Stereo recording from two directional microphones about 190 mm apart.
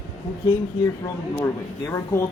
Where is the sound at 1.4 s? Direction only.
15° left (ahead or behind).